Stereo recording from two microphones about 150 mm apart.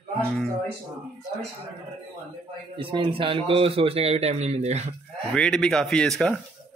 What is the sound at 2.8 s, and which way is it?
A man's voice, 35° right (ahead or behind).